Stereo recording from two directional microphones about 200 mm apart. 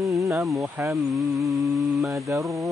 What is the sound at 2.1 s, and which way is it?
Mantra, 15° right (ahead or behind).